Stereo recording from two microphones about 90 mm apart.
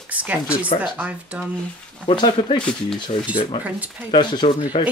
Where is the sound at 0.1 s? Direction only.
15° right (ahead or behind).